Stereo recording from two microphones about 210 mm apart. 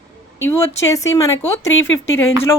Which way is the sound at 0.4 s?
10° left (ahead or behind).